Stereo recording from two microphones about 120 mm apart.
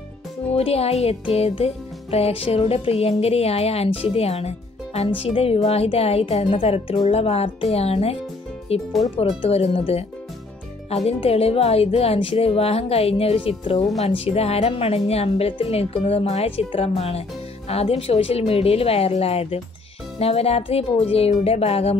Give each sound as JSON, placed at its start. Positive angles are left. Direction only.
{"t": 0.6, "sound": "music", "side_deg": 55}
{"t": 11.1, "sound": "music", "side_deg": 55}